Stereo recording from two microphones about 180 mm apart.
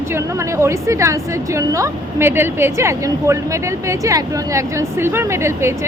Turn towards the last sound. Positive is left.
turn(degrees=-15)  # may be behind; listen again after turning